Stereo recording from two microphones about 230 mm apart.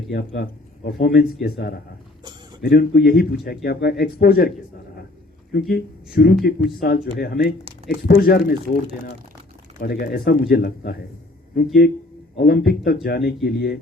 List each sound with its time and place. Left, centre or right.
0.1 s speech: left
9.8 s speech: left